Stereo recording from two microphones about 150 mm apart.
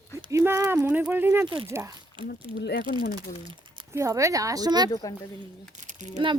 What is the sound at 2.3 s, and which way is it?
Speech, 90° left.